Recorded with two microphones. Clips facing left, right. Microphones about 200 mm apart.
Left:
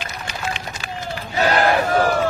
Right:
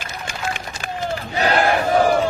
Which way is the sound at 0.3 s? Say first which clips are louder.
Right 1 dB; 50° right (ahead or behind).